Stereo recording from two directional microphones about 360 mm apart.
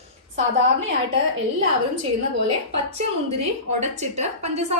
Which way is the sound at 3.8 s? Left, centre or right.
Centre.